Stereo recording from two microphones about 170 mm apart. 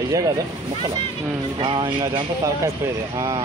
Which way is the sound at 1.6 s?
30° right (ahead or behind).